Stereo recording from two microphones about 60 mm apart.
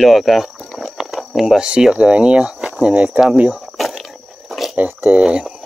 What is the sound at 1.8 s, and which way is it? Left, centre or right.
Speech, centre.